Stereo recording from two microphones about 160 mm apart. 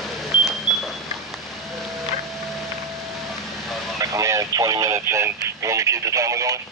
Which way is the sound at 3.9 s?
20° right (ahead or behind).